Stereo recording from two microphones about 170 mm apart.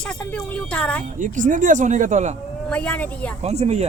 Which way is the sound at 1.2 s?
50° right (ahead or behind).